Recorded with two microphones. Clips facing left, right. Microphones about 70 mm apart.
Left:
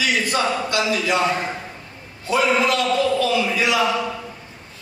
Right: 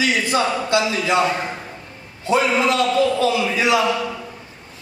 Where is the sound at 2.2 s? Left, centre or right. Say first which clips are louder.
Right 1 dB; right.